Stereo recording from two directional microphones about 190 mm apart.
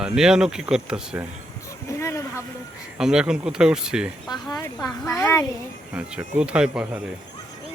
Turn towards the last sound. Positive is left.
turn(degrees=-5)  # may be behind; listen again after turning